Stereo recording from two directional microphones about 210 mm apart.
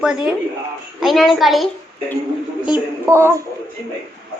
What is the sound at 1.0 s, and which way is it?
Speech, centre (ahead or behind).